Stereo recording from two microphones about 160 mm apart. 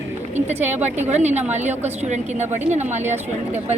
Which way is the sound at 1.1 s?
45° right (ahead or behind).